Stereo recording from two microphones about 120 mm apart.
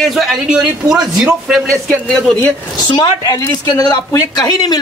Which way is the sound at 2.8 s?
40° left (ahead or behind).